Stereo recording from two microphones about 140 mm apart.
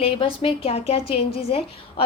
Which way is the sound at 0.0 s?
40° left (ahead or behind).